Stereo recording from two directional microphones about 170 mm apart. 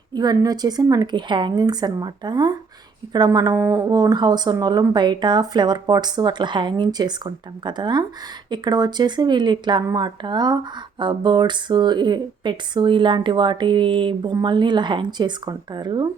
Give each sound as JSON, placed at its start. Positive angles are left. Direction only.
{"t": 0.1, "sound": "speech", "side_deg": -25}